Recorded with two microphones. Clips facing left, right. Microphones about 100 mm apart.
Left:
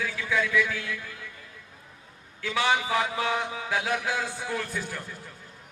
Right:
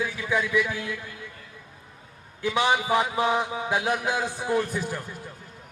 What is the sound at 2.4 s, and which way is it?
Music, 20° right (ahead or behind).